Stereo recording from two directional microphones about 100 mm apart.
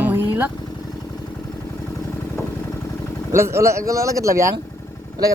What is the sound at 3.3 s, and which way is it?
Speech, 25° right (ahead or behind).